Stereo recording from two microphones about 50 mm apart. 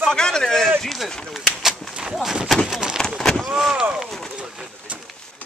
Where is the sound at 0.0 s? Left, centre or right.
Centre.